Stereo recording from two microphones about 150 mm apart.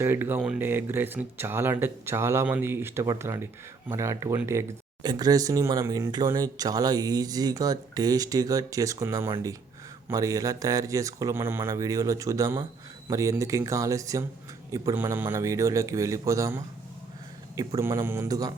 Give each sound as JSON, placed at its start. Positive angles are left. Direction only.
{"t": 0.0, "sound": "speech", "side_deg": -15}
{"t": 17.7, "sound": "speech", "side_deg": -20}